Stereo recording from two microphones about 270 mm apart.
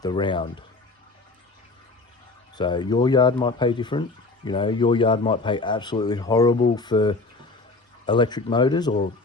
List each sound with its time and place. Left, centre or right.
0.0 s speech: centre
2.6 s speech: centre